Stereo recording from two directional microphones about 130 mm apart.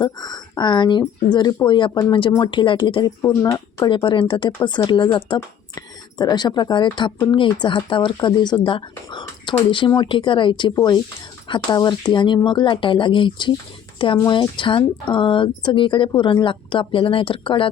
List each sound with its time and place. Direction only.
0.0 s speech: 30° left (ahead or behind)
3.2 s speech: 20° left (ahead or behind)
3.8 s speech: 40° left (ahead or behind)